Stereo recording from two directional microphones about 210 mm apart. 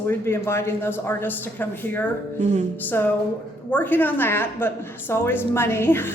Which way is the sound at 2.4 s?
35° right (ahead or behind).